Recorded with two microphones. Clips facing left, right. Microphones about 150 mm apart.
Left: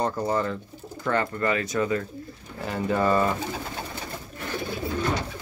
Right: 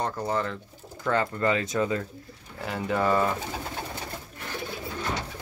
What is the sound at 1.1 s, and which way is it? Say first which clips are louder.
Speech: even; 15° right (ahead or behind).